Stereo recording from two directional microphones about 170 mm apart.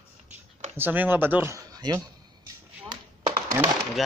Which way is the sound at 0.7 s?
10° right (ahead or behind).